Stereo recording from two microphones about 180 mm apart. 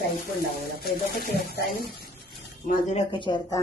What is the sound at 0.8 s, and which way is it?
Speech, 60° left (ahead or behind).